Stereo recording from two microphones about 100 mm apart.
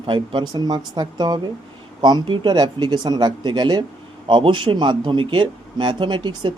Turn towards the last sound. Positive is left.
turn(degrees=-55)  # may be behind; listen again after turning